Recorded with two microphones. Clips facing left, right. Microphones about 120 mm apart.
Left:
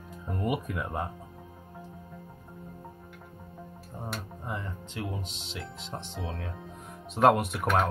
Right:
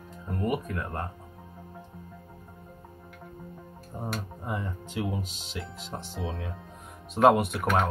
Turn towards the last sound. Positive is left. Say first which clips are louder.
# right 1 dB
turn(degrees=0)  # may be behind; listen again after turning